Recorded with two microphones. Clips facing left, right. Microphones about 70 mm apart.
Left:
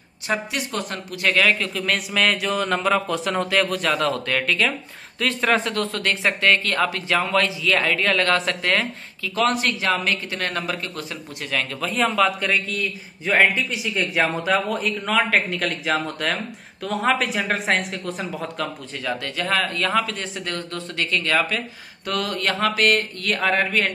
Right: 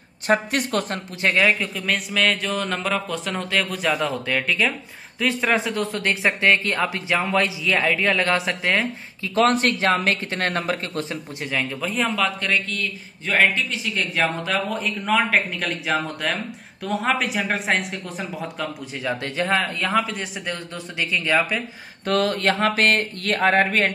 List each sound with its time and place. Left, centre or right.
0.3 s speech: right
1.2 s a man's voice: right
9.3 s speech: right
11.5 s a man's voice: centre
18.9 s speech: right
19.6 s speech: centre
22.0 s speech: right